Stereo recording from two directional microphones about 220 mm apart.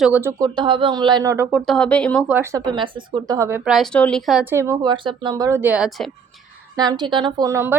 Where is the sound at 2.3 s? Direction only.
10° right (ahead or behind).